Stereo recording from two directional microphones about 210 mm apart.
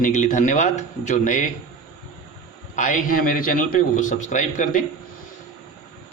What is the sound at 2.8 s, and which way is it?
A man's voice, 40° left (ahead or behind).